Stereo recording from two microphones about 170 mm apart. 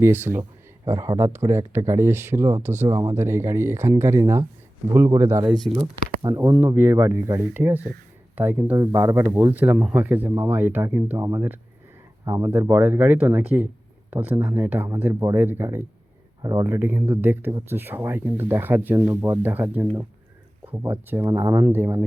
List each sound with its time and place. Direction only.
0.0 s speech: 15° right (ahead or behind)
5.5 s speech: centre (ahead or behind)
6.2 s speech: 20° right (ahead or behind)